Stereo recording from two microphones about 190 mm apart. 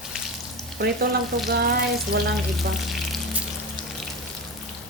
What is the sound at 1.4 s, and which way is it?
Frying, 55° right (ahead or behind).